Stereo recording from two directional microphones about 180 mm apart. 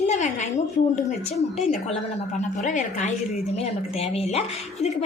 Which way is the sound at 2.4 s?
45° left (ahead or behind).